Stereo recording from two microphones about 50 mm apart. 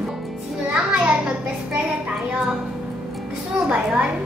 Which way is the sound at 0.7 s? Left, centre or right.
Right.